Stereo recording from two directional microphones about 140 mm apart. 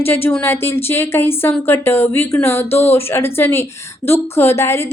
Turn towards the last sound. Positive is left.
turn(degrees=20)  # may be behind; listen again after turning